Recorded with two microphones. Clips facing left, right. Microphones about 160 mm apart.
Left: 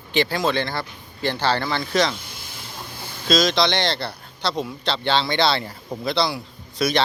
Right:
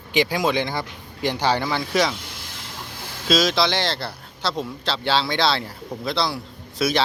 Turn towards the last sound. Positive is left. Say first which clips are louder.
# even
turn(degrees=-5)  # may be behind; listen again after turning